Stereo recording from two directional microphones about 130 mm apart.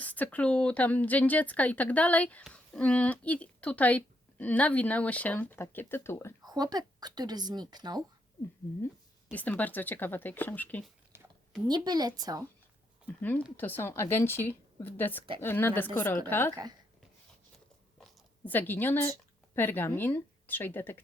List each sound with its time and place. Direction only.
0.0 s speech: 10° left (ahead or behind)
6.4 s a woman's voice: 30° right (ahead or behind)
9.3 s speech: 10° left (ahead or behind)
11.7 s a woman's voice: 30° right (ahead or behind)
13.1 s speech: 10° left (ahead or behind)
18.4 s speech: 15° left (ahead or behind)